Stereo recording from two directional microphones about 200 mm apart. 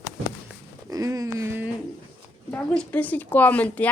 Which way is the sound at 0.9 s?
15° right (ahead or behind).